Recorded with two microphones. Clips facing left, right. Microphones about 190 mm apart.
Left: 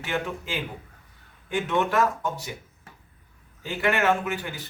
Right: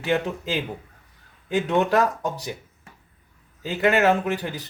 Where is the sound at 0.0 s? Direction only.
35° right (ahead or behind).